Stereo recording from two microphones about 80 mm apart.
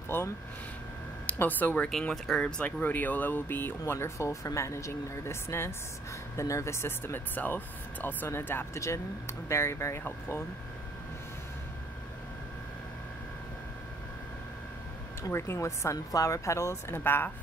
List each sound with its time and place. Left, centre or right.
0.1 s a woman's voice: left
1.9 s speech: centre
2.8 s speech: left
15.2 s speech: left
17.0 s a woman's voice: left